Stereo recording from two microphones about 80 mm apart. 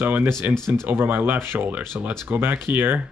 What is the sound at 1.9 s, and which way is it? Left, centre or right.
Speech, centre.